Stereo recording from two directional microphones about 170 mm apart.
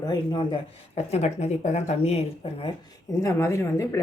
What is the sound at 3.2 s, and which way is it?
Speech, 15° left (ahead or behind).